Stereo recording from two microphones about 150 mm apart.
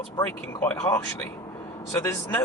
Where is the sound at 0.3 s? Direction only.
15° left (ahead or behind).